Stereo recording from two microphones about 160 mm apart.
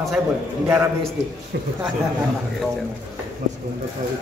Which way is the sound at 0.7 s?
20° right (ahead or behind).